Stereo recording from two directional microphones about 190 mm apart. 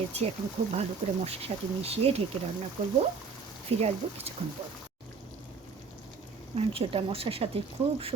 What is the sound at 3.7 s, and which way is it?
Speech, 30° right (ahead or behind).